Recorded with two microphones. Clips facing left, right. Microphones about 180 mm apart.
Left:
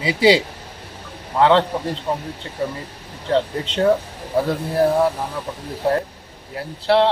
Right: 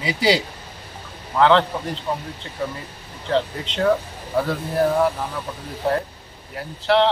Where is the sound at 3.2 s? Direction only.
30° left (ahead or behind).